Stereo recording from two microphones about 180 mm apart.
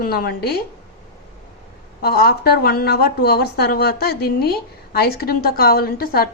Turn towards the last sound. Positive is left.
turn(degrees=55)  # may be behind; listen again after turning